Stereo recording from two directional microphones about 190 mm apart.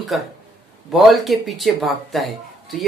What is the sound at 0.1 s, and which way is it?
Speech, centre (ahead or behind).